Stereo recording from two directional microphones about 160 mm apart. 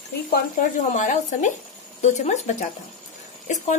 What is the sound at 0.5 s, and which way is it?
Speech, 55° left (ahead or behind).